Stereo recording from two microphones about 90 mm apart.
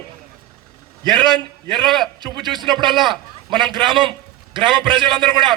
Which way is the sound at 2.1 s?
55° right (ahead or behind).